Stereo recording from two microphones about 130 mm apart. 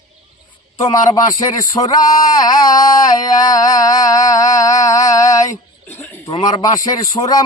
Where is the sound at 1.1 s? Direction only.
30° left (ahead or behind).